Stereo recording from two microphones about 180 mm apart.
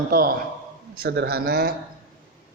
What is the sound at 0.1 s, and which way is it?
A man's voice, 55° right (ahead or behind).